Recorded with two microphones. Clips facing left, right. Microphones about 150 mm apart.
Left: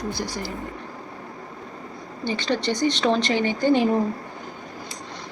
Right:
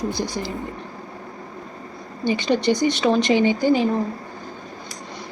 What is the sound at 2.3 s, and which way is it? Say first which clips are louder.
Speech: right 5 dB; 15° right (ahead or behind).